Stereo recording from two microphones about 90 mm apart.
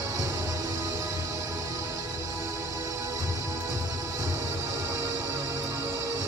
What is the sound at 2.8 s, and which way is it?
Music, 30° right (ahead or behind).